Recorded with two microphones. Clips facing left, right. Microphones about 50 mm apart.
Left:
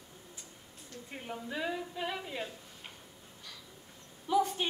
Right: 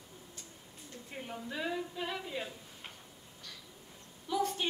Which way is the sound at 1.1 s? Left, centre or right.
Centre.